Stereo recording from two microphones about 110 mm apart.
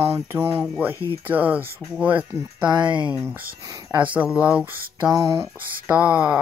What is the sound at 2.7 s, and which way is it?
Speech, 45° right (ahead or behind).